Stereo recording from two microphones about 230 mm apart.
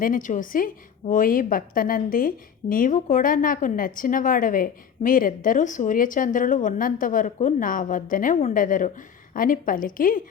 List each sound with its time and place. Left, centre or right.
0.0 s a woman's voice: left